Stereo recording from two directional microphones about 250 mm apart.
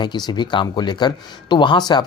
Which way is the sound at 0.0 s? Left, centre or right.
Centre.